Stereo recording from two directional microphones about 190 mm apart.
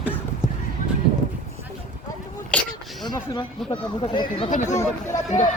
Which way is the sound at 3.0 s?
20° left (ahead or behind).